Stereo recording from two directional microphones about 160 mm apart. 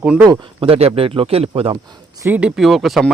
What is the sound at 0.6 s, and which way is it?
Speech, 35° right (ahead or behind).